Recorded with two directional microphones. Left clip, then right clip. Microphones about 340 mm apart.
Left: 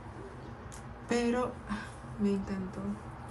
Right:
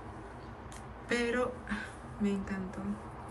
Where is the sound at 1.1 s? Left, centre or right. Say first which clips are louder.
Left 1 dB; centre.